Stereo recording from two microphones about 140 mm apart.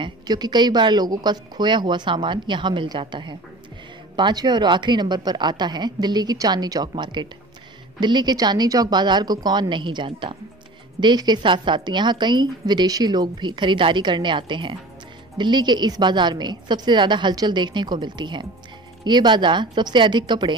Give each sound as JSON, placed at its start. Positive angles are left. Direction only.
{"t": 0.0, "sound": "a woman's voice", "side_deg": -30}